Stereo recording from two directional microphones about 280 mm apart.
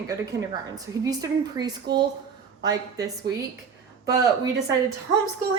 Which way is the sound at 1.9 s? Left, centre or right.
Right.